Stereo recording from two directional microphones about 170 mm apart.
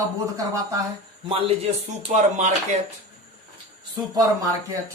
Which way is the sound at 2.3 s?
45° right (ahead or behind).